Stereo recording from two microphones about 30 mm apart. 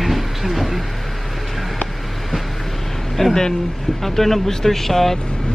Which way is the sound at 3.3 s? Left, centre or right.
Centre.